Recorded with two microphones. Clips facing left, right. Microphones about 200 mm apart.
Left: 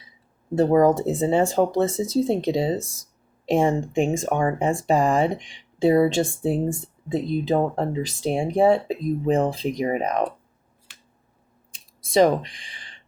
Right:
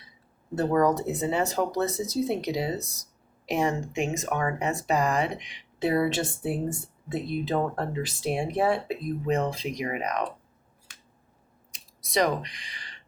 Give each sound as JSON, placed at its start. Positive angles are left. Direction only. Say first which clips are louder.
{"t": 0.5, "sound": "speech", "louder": "left 6 dB", "side_deg": 25}
{"t": 9.4, "sound": "speech", "louder": "left 6 dB", "side_deg": 50}
{"t": 9.8, "sound": "speech", "louder": "left 6 dB", "side_deg": 30}